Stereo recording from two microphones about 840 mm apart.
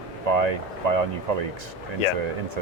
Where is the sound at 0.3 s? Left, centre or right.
Right.